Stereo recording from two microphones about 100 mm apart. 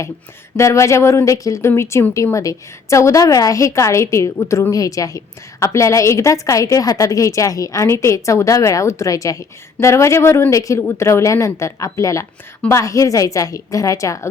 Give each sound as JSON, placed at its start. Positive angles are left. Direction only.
{"t": 0.5, "sound": "a woman's voice", "side_deg": 30}